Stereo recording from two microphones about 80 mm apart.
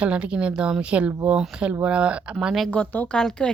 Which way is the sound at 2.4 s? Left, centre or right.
Centre.